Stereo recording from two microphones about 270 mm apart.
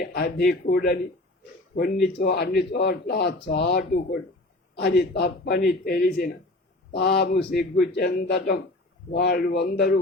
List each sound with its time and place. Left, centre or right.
0.0 s speech: left
1.7 s speech: left
2.1 s speech: left